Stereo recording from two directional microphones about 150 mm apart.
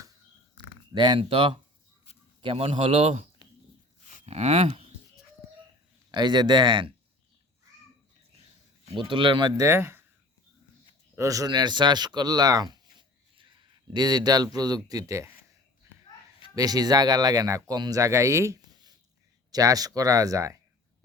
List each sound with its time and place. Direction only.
0.5 s a sound: 30° right (ahead or behind)
2.1 s a sound: 40° left (ahead or behind)
2.4 s speech: 40° right (ahead or behind)
4.3 s speech: 45° right (ahead or behind)
6.1 s speech: 30° right (ahead or behind)
9.0 s speech: 35° right (ahead or behind)
9.6 s speech: 15° right (ahead or behind)
11.1 s speech: 20° right (ahead or behind)
16.6 s speech: 25° right (ahead or behind)